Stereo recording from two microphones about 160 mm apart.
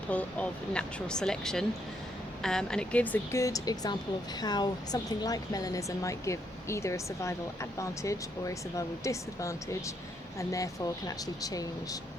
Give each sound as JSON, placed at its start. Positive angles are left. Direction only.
{"t": 0.1, "sound": "speech", "side_deg": 10}
{"t": 3.4, "sound": "speech", "side_deg": 20}